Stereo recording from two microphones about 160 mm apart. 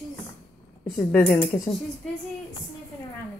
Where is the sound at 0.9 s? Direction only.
10° left (ahead or behind).